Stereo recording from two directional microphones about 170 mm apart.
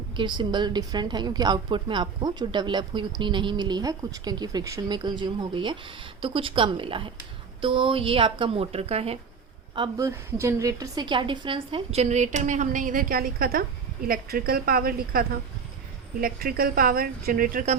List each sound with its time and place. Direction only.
0.2 s a woman's voice: 25° right (ahead or behind)
9.7 s a woman's voice: 25° right (ahead or behind); by 17.7 s 50° right (ahead or behind)